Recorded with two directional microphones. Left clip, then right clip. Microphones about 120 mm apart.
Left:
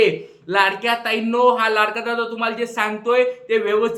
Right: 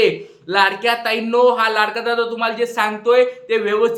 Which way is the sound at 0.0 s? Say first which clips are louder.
Right 1 dB; 25° right (ahead or behind).